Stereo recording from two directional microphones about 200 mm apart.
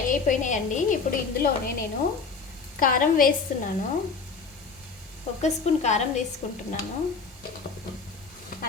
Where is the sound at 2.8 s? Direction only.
45° left (ahead or behind).